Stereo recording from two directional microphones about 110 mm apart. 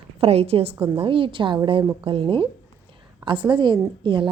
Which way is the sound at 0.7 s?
15° right (ahead or behind).